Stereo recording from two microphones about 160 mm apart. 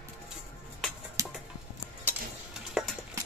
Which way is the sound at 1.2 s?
20° right (ahead or behind).